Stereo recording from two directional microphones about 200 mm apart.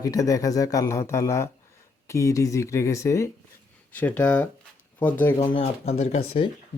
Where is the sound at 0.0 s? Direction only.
15° left (ahead or behind).